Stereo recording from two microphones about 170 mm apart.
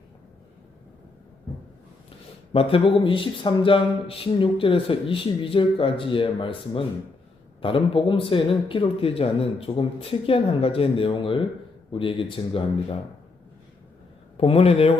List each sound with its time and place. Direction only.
2.5 s speech: 35° left (ahead or behind)
14.3 s speech: 35° left (ahead or behind)